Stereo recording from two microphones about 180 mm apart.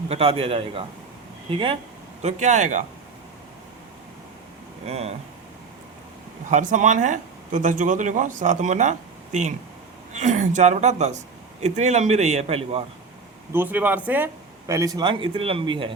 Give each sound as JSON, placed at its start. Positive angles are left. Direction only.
{"t": 0.1, "sound": "a man's voice", "side_deg": -30}
{"t": 2.2, "sound": "a man's voice", "side_deg": -40}
{"t": 4.9, "sound": "a man's voice", "side_deg": -35}
{"t": 6.5, "sound": "a man's voice", "side_deg": -45}
{"t": 13.5, "sound": "speech", "side_deg": -10}
{"t": 14.7, "sound": "speech", "side_deg": -20}